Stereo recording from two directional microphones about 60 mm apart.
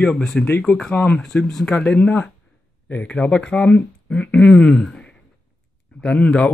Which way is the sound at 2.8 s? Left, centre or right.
Left.